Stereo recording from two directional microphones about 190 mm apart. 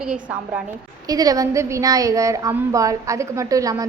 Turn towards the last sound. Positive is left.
turn(degrees=-20)  # may be behind; listen again after turning